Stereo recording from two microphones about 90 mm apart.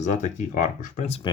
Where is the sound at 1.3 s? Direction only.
60° left (ahead or behind).